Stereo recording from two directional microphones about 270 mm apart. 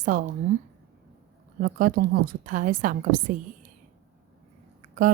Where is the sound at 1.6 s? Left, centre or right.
Right.